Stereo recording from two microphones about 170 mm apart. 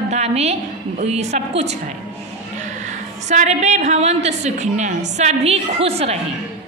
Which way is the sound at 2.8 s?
45° right (ahead or behind).